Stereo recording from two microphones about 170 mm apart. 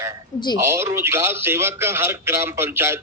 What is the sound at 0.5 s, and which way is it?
A man's voice, 15° right (ahead or behind).